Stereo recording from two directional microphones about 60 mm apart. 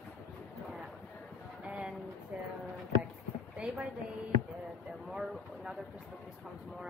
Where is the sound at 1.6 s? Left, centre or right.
Centre.